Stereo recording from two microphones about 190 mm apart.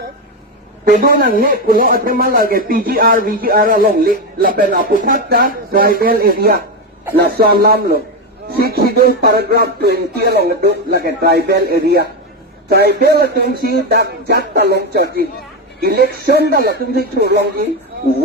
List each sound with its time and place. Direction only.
0.9 s speech: 50° right (ahead or behind)